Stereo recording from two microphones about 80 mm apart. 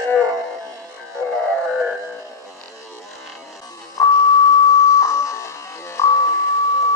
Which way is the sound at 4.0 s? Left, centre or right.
Left.